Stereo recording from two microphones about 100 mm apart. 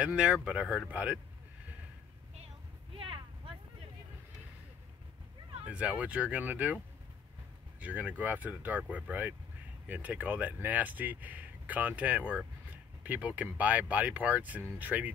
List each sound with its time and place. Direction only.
0.0 s speech: 10° right (ahead or behind)
3.0 s a sound: 65° right (ahead or behind)
5.7 s speech: 10° right (ahead or behind)
7.8 s speech: 15° right (ahead or behind)